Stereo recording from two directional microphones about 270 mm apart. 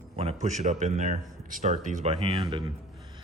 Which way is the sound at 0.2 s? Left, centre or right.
Right.